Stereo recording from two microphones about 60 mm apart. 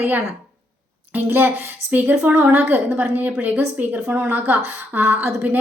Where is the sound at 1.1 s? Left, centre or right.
Right.